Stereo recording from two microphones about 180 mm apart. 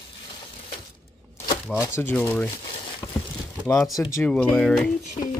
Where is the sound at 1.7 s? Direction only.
15° left (ahead or behind).